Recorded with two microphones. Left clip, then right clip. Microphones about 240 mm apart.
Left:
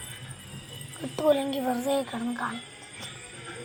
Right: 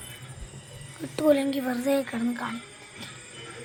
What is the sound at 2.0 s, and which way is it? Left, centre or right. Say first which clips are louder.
Speech: right 1 dB; right.